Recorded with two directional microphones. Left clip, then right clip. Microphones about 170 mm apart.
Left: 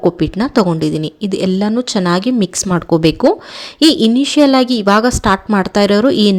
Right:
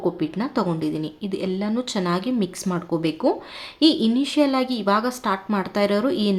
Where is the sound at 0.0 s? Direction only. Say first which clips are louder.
Left 10 dB; 50° left (ahead or behind).